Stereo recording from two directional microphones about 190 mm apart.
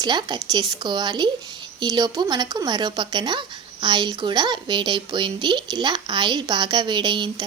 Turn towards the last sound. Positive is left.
turn(degrees=-25)  # may be behind; listen again after turning